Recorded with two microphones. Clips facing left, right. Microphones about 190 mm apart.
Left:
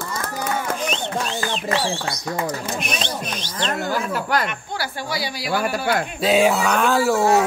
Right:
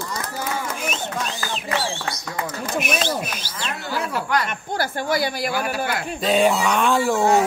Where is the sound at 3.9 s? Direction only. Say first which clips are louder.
Right 3 dB; 45° left (ahead or behind).